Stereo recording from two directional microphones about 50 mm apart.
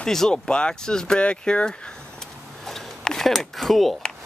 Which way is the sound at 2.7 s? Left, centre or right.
Centre.